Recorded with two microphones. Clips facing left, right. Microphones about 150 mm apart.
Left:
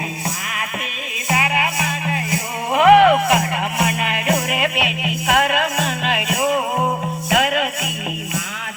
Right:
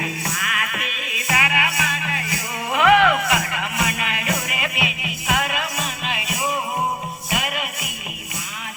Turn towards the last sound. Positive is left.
turn(degrees=90)